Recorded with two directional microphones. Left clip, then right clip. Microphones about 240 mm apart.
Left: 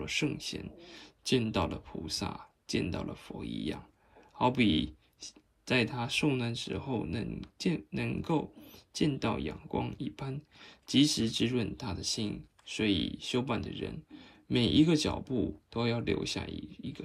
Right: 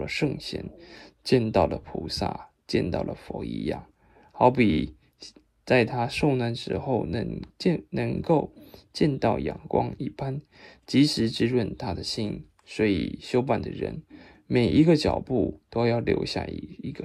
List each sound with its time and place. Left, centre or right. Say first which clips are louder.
0.4 s speech: right 5 dB; centre